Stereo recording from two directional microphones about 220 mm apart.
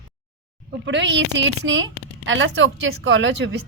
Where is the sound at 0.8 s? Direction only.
55° right (ahead or behind).